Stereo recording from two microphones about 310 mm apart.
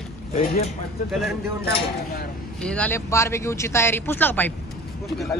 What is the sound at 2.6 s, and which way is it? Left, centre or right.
Speech, centre.